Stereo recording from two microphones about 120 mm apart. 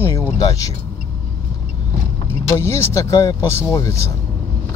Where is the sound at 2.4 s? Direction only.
20° left (ahead or behind).